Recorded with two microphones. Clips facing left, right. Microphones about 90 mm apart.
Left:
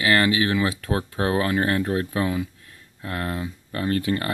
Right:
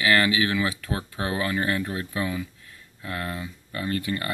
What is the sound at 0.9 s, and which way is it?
Speech, 45° left (ahead or behind).